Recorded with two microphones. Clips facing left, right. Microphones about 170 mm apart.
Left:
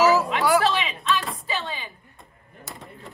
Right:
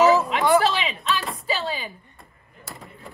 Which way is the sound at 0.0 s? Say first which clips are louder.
Right 2 dB; centre (ahead or behind).